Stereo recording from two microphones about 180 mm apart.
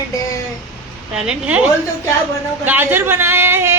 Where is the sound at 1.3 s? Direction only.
5° right (ahead or behind).